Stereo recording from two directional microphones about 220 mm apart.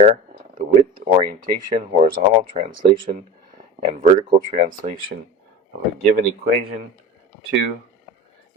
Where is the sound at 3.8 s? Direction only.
35° right (ahead or behind).